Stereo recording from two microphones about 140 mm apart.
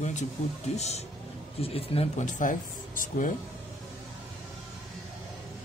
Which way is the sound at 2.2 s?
70° left (ahead or behind).